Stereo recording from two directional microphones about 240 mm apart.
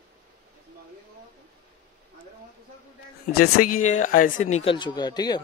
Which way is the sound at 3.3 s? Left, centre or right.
Left.